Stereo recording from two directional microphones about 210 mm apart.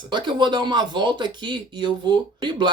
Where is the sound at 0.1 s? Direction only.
20° right (ahead or behind).